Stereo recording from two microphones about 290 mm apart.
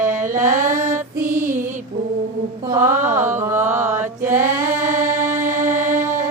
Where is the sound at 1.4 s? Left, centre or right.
Right.